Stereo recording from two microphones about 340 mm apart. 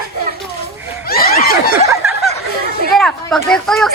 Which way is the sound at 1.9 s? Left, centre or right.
Centre.